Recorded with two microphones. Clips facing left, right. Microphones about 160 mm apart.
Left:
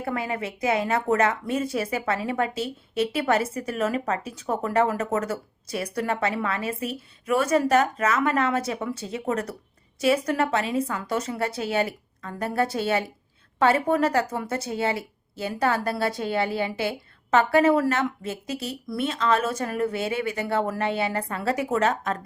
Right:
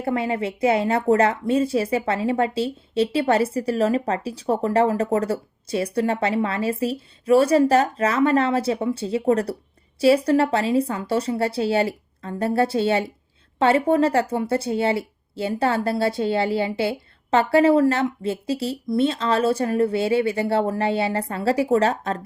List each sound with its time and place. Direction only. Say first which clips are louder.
0.0 s speech: right 5 dB; 30° right (ahead or behind)